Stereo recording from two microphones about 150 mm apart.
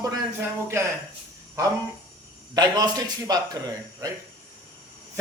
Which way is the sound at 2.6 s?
25° right (ahead or behind).